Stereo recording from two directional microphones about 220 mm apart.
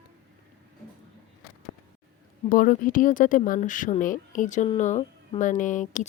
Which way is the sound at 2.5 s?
40° left (ahead or behind).